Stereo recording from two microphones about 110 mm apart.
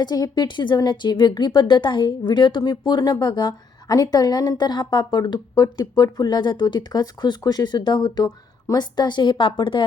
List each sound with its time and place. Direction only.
0.0 s speech: 40° left (ahead or behind)